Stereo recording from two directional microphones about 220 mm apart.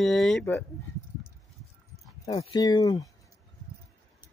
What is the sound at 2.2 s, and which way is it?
Speech, 25° left (ahead or behind).